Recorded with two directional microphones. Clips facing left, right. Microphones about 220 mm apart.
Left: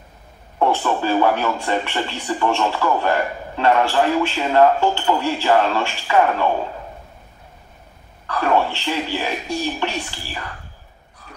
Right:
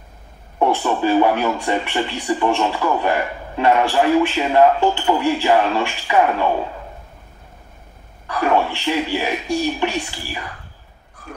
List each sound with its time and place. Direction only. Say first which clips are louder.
0.6 s speech: right 1 dB; 15° right (ahead or behind)
8.3 s speech: right 1 dB; 15° right (ahead or behind)
11.2 s a sound: right 8 dB; 50° right (ahead or behind)